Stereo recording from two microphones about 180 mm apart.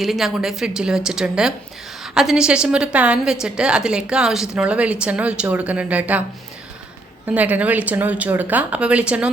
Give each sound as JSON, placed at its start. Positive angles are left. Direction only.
{"t": 0.0, "sound": "speech", "side_deg": 0}
{"t": 7.3, "sound": "speech", "side_deg": -10}